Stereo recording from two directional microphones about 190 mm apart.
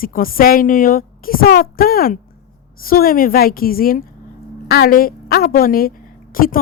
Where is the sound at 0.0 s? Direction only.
50° left (ahead or behind).